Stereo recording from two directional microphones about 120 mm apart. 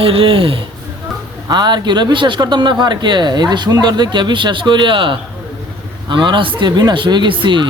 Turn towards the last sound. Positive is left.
turn(degrees=-40)  # may be behind; listen again after turning